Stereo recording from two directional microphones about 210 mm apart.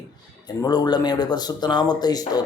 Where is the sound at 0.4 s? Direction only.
20° left (ahead or behind).